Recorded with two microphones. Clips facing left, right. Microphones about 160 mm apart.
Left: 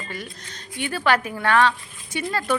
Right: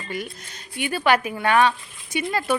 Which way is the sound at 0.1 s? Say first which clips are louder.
Right 4 dB; 15° right (ahead or behind).